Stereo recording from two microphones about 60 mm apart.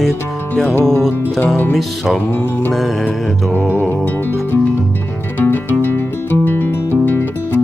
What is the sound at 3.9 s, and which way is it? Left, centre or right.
Music, left.